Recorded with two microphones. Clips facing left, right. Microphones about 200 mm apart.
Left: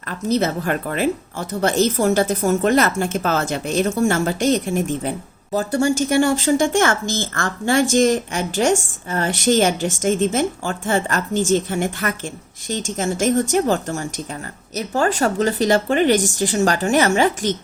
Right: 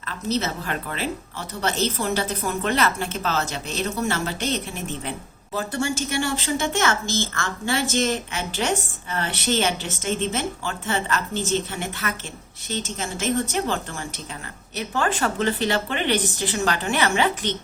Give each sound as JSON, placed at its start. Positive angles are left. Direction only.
{"t": 0.0, "sound": "speech", "side_deg": 50}